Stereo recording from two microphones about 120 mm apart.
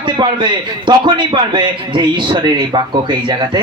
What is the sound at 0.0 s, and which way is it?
A man's voice, 40° right (ahead or behind).